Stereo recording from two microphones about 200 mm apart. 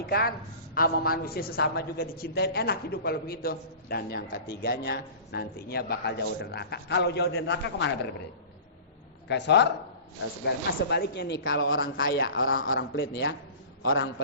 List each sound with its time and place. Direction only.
0.0 s a woman's voice: 50° left (ahead or behind)
9.2 s a man's voice: 60° left (ahead or behind)
12.5 s a woman's voice: 50° left (ahead or behind)